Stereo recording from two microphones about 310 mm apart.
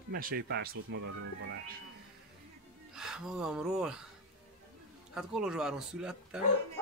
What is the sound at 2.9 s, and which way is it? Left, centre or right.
Speech, centre.